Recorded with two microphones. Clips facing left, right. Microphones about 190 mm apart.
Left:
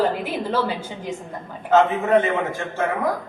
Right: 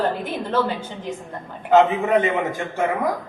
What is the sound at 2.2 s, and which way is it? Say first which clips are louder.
Speech: right 1 dB; 15° right (ahead or behind).